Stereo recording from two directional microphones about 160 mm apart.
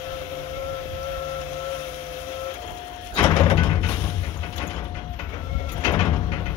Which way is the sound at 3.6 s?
25° left (ahead or behind).